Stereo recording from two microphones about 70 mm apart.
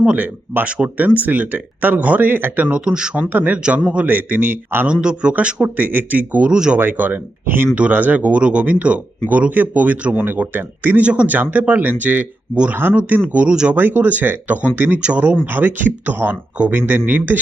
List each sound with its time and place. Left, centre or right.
0.0 s speech: centre
4.9 s speech: centre
13.5 s speech: centre
13.7 s speech: right